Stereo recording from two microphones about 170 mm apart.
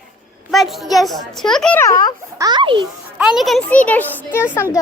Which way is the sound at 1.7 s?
20° left (ahead or behind).